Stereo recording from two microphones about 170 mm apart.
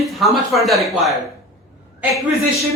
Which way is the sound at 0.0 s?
Centre (ahead or behind).